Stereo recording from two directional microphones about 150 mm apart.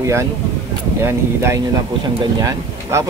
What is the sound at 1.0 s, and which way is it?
Speech, 15° right (ahead or behind).